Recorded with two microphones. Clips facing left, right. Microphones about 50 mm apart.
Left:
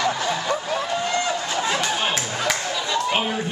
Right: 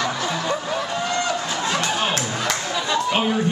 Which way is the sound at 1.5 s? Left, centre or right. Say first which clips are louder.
Even; centre.